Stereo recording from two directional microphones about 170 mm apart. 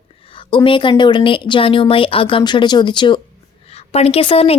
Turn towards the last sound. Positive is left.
turn(degrees=35)  # may be behind; listen again after turning